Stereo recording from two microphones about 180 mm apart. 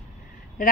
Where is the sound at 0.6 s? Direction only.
50° left (ahead or behind).